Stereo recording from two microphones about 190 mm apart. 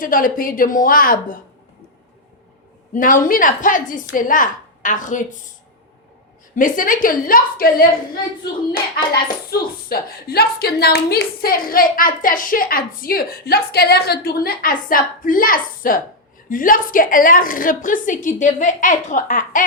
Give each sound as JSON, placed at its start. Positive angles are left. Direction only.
{"t": 0.0, "sound": "a woman's voice", "side_deg": 50}
{"t": 2.9, "sound": "a woman's voice", "side_deg": 45}
{"t": 6.6, "sound": "a woman's voice", "side_deg": 45}
{"t": 9.5, "sound": "a woman's voice", "side_deg": 55}